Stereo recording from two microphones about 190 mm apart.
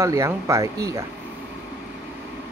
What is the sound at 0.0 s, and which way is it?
Speech, 15° right (ahead or behind).